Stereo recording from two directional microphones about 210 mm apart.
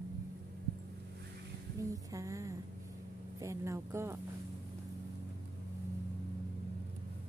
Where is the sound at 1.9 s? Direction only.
15° right (ahead or behind).